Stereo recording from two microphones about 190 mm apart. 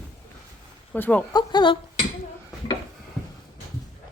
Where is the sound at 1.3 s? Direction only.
20° left (ahead or behind).